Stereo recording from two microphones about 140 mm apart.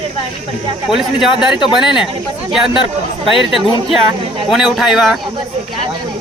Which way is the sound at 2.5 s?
5° right (ahead or behind).